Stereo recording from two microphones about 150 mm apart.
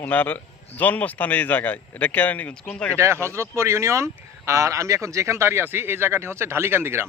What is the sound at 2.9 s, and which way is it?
Speech, 20° right (ahead or behind).